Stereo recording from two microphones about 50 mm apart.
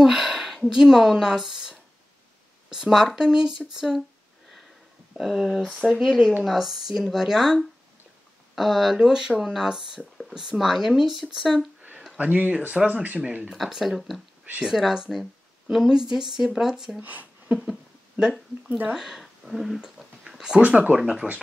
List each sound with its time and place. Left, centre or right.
0.0 s a sound: centre
0.7 s speech: centre
5.2 s speech: centre
12.2 s speech: right
13.7 s speech: centre
17.0 s speech: right
18.7 s speech: right
18.9 s a sound: centre
20.6 s speech: right
21.0 s speech: centre